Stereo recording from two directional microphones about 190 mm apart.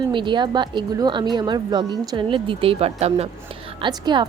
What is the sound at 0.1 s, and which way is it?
A woman's voice, 25° right (ahead or behind).